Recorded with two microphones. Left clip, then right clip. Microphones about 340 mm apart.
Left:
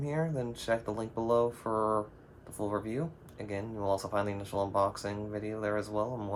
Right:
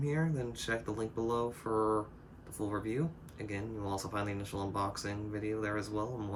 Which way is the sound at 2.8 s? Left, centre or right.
Centre.